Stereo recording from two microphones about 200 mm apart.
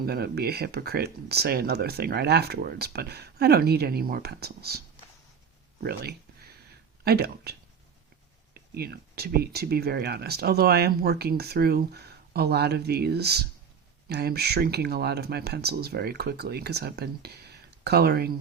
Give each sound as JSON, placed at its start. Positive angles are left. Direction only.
{"t": 0.0, "sound": "speech", "side_deg": -50}
{"t": 5.8, "sound": "a sound", "side_deg": -50}
{"t": 7.0, "sound": "speech", "side_deg": -50}
{"t": 8.5, "sound": "speech", "side_deg": -50}